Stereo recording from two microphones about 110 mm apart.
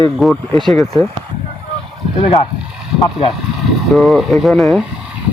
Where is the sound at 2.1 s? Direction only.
55° left (ahead or behind).